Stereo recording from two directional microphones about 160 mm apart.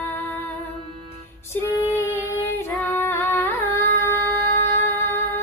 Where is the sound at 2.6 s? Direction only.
15° left (ahead or behind).